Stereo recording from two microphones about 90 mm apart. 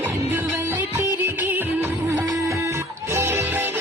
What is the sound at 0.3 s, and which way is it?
Music, 25° right (ahead or behind).